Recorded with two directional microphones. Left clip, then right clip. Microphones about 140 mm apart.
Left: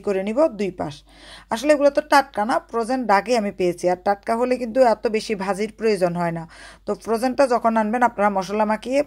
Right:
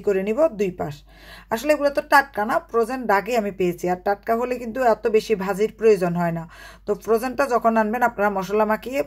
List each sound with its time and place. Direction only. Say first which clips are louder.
0.0 s speech: even; 35° left (ahead or behind)